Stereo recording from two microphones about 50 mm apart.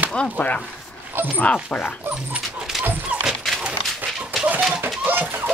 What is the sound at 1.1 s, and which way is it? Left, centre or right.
Speech, right.